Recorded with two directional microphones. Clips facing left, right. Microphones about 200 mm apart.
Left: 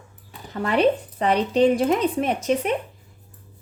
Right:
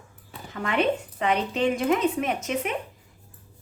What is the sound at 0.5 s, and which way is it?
Speech, 35° left (ahead or behind).